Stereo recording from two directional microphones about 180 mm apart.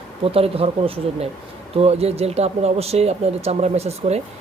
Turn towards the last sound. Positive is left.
turn(degrees=-35)  # may be behind; listen again after turning